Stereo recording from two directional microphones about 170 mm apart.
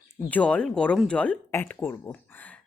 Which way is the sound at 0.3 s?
10° left (ahead or behind).